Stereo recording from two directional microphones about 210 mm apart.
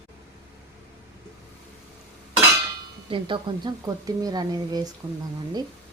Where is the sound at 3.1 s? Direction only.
25° right (ahead or behind).